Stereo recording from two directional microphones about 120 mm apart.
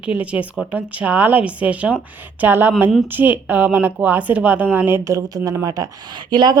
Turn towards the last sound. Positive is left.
turn(degrees=-35)  # may be behind; listen again after turning